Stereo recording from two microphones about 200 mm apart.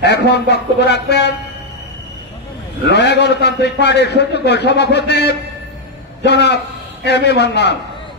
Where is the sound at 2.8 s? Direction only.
55° left (ahead or behind).